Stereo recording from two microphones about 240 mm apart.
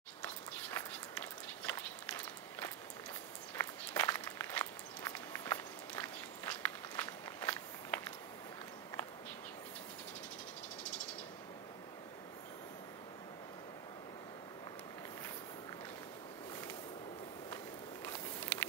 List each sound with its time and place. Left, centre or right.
0.2 s walk: centre
3.5 s walk: centre
18.0 s a sound: centre